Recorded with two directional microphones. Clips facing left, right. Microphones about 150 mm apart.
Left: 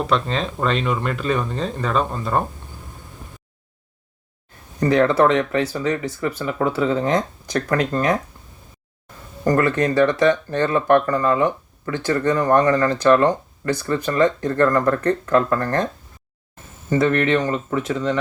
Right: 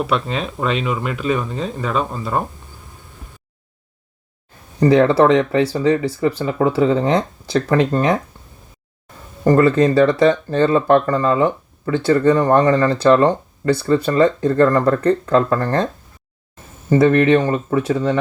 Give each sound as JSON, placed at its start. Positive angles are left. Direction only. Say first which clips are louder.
{"t": 0.0, "sound": "speech", "louder": "right 1 dB", "side_deg": -5}
{"t": 4.8, "sound": "speech", "louder": "right 4 dB", "side_deg": -30}
{"t": 9.4, "sound": "speech", "louder": "right 5 dB", "side_deg": -25}
{"t": 16.9, "sound": "speech", "louder": "right 5 dB", "side_deg": -30}